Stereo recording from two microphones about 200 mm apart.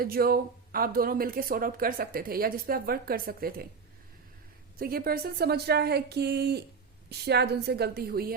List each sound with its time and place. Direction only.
0.0 s speech: 50° right (ahead or behind)
4.8 s a woman's voice: 50° right (ahead or behind)